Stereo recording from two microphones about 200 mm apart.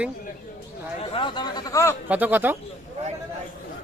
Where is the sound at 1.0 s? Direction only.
25° left (ahead or behind).